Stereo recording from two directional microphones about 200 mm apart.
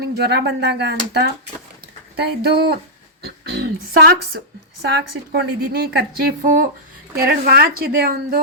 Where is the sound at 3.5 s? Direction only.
50° right (ahead or behind).